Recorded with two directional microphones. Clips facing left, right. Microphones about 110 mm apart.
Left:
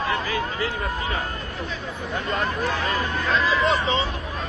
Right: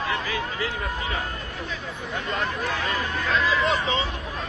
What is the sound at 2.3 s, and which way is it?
Speech, 35° left (ahead or behind).